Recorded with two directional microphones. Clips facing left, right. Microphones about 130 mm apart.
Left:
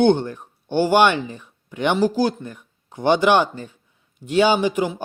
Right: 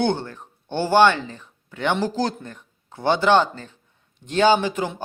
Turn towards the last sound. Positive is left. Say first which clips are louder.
# left 1 dB
turn(degrees=15)  # may be behind; listen again after turning